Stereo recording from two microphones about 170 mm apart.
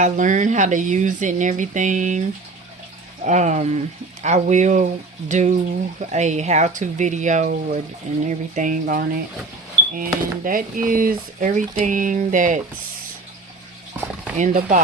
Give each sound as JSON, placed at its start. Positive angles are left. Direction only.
{"t": 0.0, "sound": "speech", "side_deg": -45}
{"t": 3.2, "sound": "speech", "side_deg": -45}
{"t": 14.3, "sound": "speech", "side_deg": -45}